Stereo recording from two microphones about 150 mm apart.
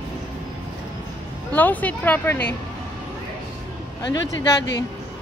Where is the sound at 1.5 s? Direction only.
10° left (ahead or behind).